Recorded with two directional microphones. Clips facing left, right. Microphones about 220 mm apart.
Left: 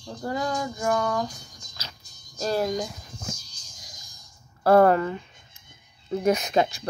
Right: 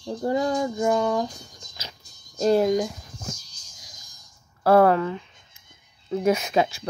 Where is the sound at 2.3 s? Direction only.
20° right (ahead or behind).